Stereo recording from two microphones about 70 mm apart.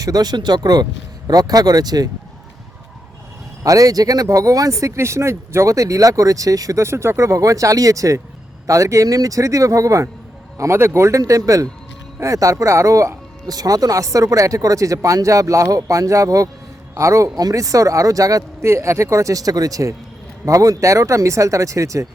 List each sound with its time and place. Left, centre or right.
0.0 s speech: right
3.6 s speech: right
11.2 s speech: right
18.7 s speech: right